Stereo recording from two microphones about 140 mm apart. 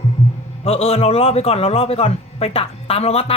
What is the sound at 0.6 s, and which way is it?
A man's voice, 45° left (ahead or behind).